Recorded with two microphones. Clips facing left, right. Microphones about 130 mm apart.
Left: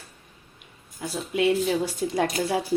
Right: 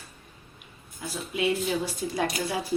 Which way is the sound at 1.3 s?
60° left (ahead or behind).